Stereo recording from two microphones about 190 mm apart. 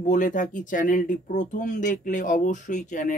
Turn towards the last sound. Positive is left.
turn(degrees=40)  # may be behind; listen again after turning